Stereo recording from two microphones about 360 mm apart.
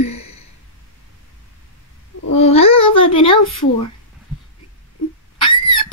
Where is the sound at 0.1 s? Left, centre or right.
Left.